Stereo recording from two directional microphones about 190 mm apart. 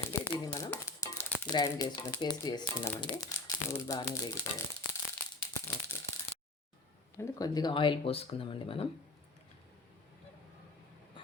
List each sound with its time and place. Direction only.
0.1 s crumpling: 15° left (ahead or behind)
2.2 s speech: 20° left (ahead or behind)
5.4 s a sound: 10° left (ahead or behind)
7.2 s speech: 15° left (ahead or behind)